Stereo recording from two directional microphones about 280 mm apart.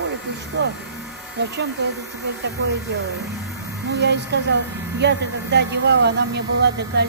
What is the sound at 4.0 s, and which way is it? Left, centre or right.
Speech, right.